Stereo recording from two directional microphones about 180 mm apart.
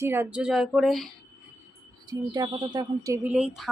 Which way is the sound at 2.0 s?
20° right (ahead or behind).